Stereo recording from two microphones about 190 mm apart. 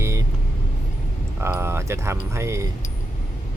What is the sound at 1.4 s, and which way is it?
Speech, 15° right (ahead or behind).